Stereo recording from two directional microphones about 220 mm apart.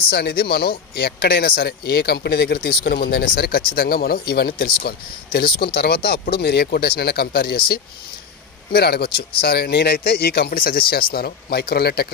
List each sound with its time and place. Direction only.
0.1 s speech: 45° left (ahead or behind)